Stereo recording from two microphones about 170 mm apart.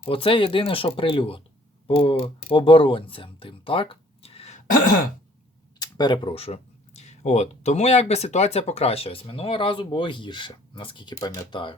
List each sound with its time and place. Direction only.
0.0 s speech: 35° left (ahead or behind)
5.8 s speech: 25° left (ahead or behind)